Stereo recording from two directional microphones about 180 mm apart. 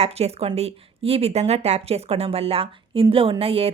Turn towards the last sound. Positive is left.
turn(degrees=-30)  # may be behind; listen again after turning